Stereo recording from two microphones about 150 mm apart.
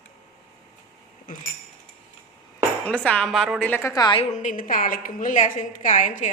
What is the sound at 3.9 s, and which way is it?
Speech, 30° left (ahead or behind).